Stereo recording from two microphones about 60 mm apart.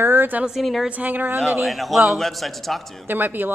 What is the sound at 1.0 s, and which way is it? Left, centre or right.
Speech, right.